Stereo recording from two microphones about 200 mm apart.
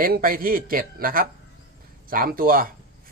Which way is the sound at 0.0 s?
45° right (ahead or behind).